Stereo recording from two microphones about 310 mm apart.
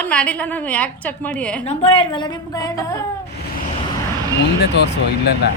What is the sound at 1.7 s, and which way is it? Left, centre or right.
A woman's voice, centre.